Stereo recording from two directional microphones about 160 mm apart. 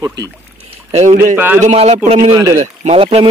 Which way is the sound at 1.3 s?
10° right (ahead or behind).